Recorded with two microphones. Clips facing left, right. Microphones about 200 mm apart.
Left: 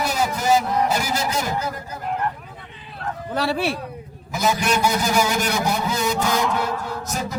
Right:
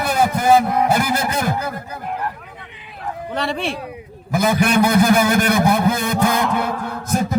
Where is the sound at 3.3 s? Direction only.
5° left (ahead or behind).